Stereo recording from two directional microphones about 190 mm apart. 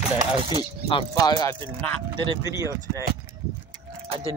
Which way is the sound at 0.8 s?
25° left (ahead or behind).